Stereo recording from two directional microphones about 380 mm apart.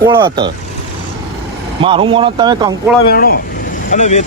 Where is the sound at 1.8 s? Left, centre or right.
Centre.